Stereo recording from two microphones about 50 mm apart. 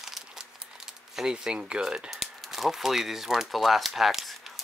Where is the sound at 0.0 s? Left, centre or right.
Centre.